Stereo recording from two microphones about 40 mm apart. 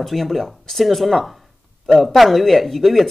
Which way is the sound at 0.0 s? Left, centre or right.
Centre.